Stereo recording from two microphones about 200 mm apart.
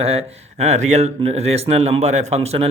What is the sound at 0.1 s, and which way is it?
Speech, 30° right (ahead or behind).